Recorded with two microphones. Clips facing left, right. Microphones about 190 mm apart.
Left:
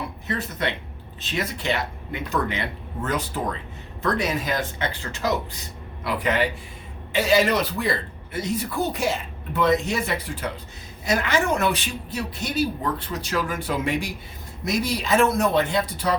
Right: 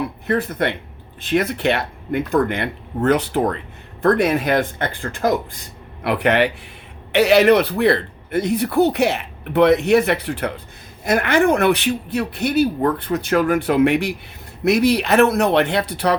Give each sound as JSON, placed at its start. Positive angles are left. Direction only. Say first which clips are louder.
{"t": 0.3, "sound": "speech", "louder": "right 7 dB", "side_deg": -55}
{"t": 6.0, "sound": "speech", "louder": "right 6 dB", "side_deg": -65}
{"t": 11.0, "sound": "speech", "louder": "right 7 dB", "side_deg": -55}